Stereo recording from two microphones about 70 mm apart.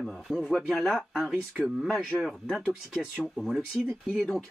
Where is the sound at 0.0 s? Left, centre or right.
Centre.